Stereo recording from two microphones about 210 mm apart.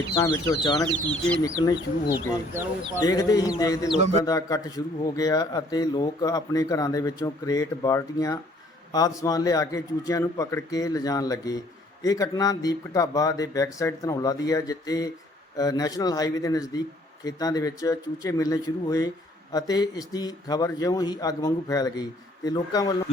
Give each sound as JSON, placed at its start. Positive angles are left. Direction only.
{"t": 0.1, "sound": "a man's voice", "side_deg": 15}